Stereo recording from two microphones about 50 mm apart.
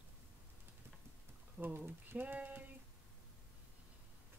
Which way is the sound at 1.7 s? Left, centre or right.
Right.